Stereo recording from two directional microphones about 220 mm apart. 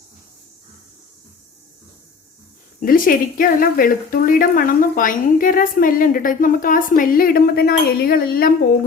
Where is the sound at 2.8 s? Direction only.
40° left (ahead or behind).